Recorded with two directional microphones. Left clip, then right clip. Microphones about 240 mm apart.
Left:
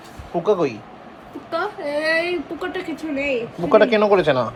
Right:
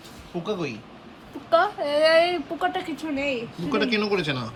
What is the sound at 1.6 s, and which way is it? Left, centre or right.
Speech, centre.